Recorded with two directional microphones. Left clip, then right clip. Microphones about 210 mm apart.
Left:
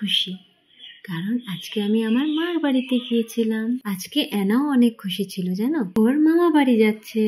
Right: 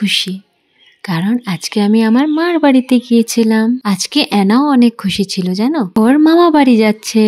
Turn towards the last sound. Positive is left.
turn(degrees=-50)  # may be behind; listen again after turning